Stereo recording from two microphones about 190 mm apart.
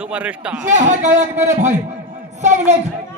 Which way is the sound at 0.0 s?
5° right (ahead or behind).